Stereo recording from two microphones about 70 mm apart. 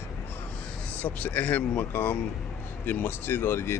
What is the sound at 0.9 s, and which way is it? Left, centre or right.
Speech, left.